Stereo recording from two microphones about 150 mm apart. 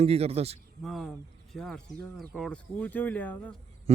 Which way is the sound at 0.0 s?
45° right (ahead or behind).